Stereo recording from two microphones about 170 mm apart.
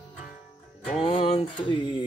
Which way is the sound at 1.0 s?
35° left (ahead or behind).